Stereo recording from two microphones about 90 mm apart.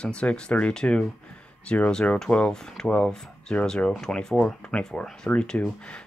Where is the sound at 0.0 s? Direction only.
10° left (ahead or behind).